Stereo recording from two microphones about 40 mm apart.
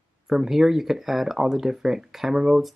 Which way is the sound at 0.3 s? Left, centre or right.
Centre.